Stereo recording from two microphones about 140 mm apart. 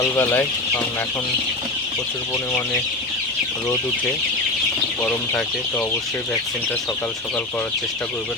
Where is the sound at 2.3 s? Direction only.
20° left (ahead or behind).